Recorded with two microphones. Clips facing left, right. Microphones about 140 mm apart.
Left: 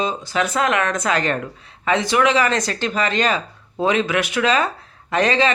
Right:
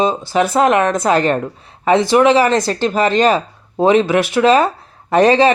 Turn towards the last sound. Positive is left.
turn(degrees=-35)  # may be behind; listen again after turning